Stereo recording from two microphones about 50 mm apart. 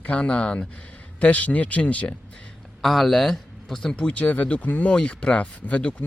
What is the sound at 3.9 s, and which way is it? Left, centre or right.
Speech, left.